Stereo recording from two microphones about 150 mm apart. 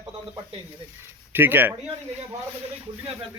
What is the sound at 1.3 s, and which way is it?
Speech, 15° right (ahead or behind).